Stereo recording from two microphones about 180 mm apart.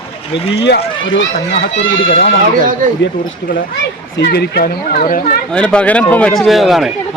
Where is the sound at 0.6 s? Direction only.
85° left.